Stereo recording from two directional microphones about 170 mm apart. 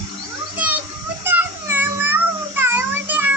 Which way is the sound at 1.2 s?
10° right (ahead or behind).